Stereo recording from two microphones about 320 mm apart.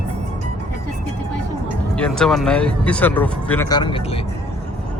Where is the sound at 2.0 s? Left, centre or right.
Centre.